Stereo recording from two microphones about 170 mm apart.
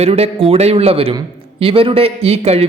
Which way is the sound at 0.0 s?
35° right (ahead or behind).